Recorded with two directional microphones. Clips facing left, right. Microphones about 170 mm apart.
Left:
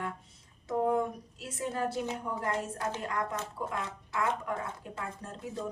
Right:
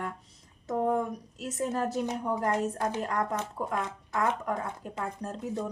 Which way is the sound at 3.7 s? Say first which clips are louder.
Right 4 dB; 45° right (ahead or behind).